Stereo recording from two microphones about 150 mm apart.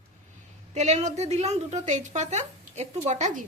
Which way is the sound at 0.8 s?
50° right (ahead or behind).